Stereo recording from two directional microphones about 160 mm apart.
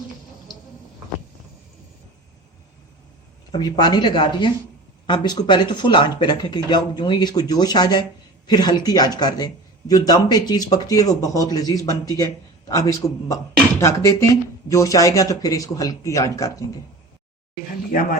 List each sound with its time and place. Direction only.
3.5 s a man's voice: 25° left (ahead or behind)